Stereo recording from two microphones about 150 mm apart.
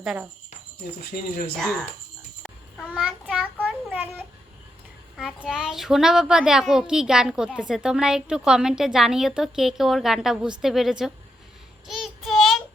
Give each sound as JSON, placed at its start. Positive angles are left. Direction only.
{"t": 0.0, "sound": "speech", "side_deg": 0}
{"t": 1.1, "sound": "speech", "side_deg": 75}
{"t": 2.4, "sound": "a sound", "side_deg": 5}
{"t": 2.9, "sound": "a child's voice", "side_deg": -5}
{"t": 3.9, "sound": "a child's voice", "side_deg": -15}
{"t": 5.1, "sound": "a child's voice", "side_deg": -5}
{"t": 11.9, "sound": "child singing", "side_deg": 0}